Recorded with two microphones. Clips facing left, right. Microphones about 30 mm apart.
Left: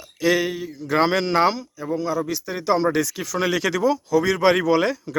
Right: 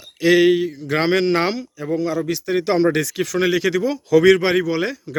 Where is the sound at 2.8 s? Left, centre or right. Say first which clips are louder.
Right 3 dB; right.